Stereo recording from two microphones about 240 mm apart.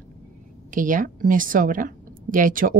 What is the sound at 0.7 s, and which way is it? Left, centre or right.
A woman's voice, right.